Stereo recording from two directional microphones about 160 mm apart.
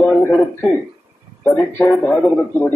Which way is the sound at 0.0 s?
10° left (ahead or behind).